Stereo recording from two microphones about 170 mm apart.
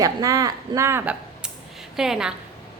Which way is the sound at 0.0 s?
20° right (ahead or behind).